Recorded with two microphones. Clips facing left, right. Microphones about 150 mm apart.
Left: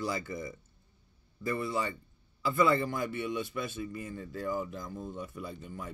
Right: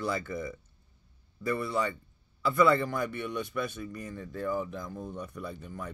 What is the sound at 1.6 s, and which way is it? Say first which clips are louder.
A man's voice: right 2 dB; 55° right (ahead or behind).